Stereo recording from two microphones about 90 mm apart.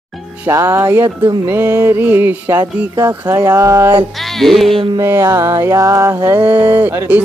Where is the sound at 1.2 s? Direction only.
50° right (ahead or behind).